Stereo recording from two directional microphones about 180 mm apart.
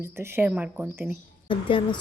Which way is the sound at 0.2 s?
10° right (ahead or behind).